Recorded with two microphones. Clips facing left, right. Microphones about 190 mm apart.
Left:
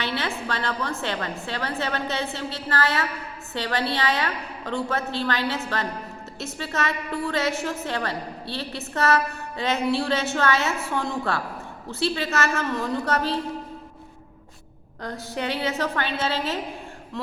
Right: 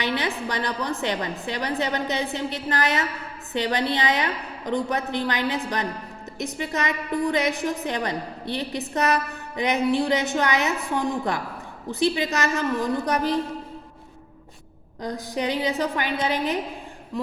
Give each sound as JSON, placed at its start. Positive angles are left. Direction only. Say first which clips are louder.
{"t": 0.0, "sound": "a woman's voice", "louder": "right 2 dB", "side_deg": -15}
{"t": 15.0, "sound": "a woman's voice", "louder": "right 2 dB", "side_deg": -15}